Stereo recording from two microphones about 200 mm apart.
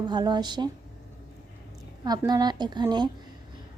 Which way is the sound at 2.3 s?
20° right (ahead or behind).